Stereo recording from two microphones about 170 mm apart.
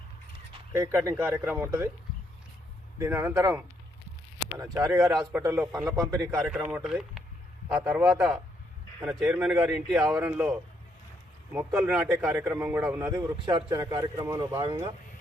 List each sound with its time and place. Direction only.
0.7 s a man's voice: 15° right (ahead or behind)
3.0 s a man's voice: 15° right (ahead or behind)
4.7 s speech: 20° right (ahead or behind)
5.0 s speech: centre (ahead or behind)
5.4 s a man's voice: 20° right (ahead or behind)
6.5 s a man's voice: 5° right (ahead or behind); by 14.8 s 30° right (ahead or behind)